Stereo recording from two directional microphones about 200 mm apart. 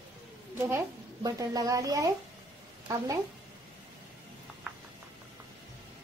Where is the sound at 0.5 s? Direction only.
15° right (ahead or behind).